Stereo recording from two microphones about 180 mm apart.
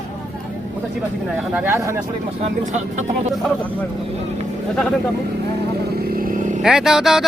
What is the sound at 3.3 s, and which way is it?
Speech, centre (ahead or behind).